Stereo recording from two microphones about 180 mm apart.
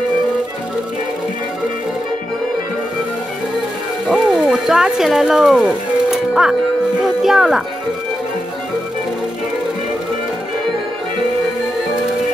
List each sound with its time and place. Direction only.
4.1 s music: 5° right (ahead or behind)
7.2 s speech: centre (ahead or behind)